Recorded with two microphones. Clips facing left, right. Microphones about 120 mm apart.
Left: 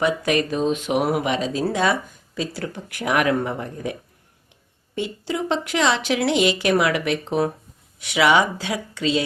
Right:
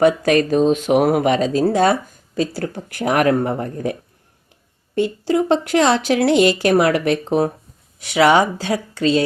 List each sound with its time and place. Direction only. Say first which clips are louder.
0.0 s speech: right 6 dB; 45° right (ahead or behind)
4.9 s speech: right 8 dB; 45° right (ahead or behind)